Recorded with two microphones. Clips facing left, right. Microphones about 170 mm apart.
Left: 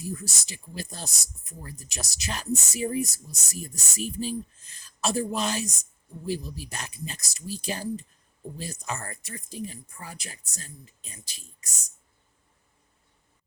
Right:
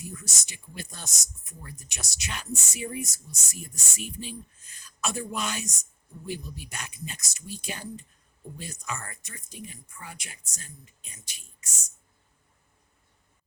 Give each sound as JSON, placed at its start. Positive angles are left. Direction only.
{"t": 0.0, "sound": "speech", "side_deg": 35}